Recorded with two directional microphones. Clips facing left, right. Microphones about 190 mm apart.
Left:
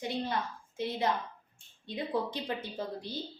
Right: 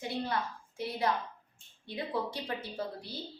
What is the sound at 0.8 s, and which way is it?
Speech, 25° left (ahead or behind).